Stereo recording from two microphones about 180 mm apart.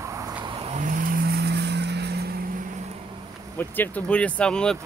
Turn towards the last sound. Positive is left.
turn(degrees=5)  # may be behind; listen again after turning